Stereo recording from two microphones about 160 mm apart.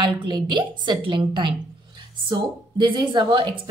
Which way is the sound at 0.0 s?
30° right (ahead or behind).